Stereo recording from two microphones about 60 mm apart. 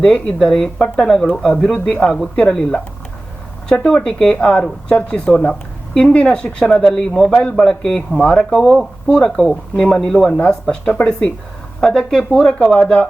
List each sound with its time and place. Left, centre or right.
0.0 s speech: centre
3.7 s speech: centre
11.8 s speech: centre